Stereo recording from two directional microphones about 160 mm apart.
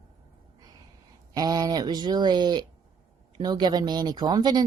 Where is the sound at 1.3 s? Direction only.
25° right (ahead or behind).